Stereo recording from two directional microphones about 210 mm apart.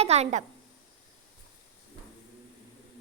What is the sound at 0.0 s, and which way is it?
Speech, 30° right (ahead or behind).